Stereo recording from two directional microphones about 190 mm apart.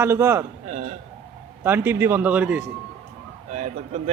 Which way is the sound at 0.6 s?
35° right (ahead or behind).